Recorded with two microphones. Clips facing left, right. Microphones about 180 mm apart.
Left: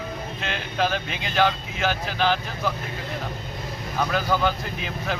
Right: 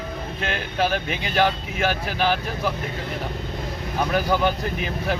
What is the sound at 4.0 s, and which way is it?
Speech, 15° right (ahead or behind).